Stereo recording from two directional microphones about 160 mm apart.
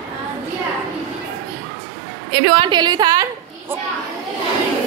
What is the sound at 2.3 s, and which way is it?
Speech, 30° right (ahead or behind).